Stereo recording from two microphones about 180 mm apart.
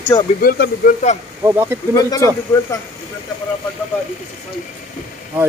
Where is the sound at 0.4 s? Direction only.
55° left (ahead or behind).